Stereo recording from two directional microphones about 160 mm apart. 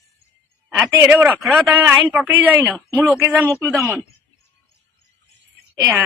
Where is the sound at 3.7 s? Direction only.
Centre (ahead or behind).